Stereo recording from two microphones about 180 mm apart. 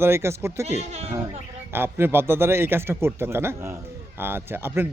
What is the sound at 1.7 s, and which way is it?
A man's voice, 10° right (ahead or behind).